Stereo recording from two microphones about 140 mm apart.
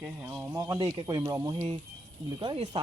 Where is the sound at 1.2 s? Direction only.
20° right (ahead or behind).